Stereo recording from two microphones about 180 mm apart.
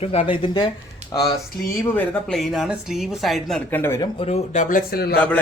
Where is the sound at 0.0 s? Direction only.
35° left (ahead or behind).